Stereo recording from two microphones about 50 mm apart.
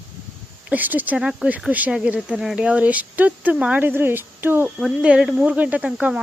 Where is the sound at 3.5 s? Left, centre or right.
Right.